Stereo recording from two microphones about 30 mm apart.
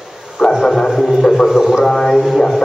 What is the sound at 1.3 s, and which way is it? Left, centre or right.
Speech, centre.